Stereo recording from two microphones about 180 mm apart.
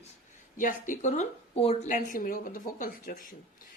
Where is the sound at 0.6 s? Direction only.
45° left (ahead or behind).